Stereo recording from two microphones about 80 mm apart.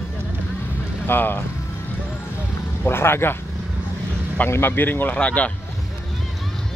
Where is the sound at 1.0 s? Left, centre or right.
Left.